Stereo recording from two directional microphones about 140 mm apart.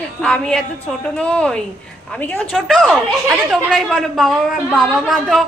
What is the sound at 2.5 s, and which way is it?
A woman's voice, centre (ahead or behind).